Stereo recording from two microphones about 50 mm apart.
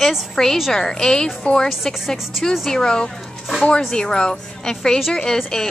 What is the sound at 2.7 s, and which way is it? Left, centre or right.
A woman's voice, centre.